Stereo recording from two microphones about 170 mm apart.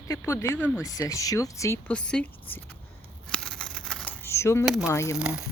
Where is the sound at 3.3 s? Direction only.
5° left (ahead or behind).